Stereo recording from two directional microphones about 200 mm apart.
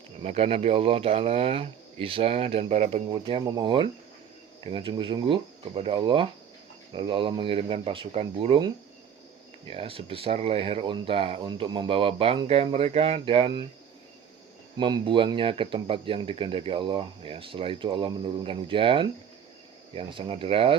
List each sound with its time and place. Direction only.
0.2 s speech: 30° right (ahead or behind)
14.8 s speech: 25° right (ahead or behind)